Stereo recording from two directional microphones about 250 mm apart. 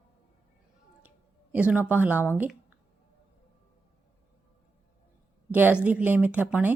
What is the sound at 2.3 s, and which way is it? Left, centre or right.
Speech, centre.